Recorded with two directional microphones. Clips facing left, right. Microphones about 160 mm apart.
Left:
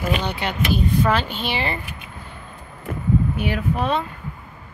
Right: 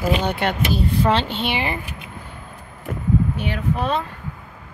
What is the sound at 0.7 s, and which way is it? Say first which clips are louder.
Speech: left 2 dB; 30° right (ahead or behind).